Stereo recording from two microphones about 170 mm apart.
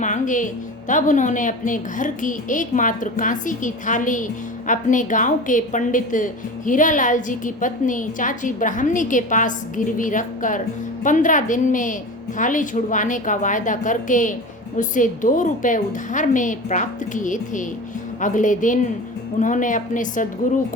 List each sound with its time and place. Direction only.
0.0 s a woman's voice: 45° left (ahead or behind)